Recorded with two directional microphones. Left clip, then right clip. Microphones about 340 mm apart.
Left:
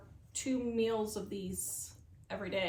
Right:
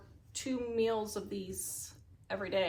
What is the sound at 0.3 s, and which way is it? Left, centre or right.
Speech, centre.